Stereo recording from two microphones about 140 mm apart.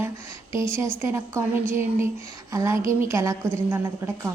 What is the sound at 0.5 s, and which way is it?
Speech, 20° right (ahead or behind).